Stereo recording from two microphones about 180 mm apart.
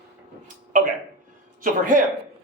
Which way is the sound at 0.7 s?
45° right (ahead or behind).